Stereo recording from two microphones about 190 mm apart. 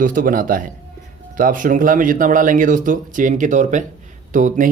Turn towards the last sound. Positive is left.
turn(degrees=-45)  # may be behind; listen again after turning